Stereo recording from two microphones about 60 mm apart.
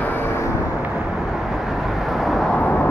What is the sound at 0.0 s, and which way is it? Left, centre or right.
Vehicle, left.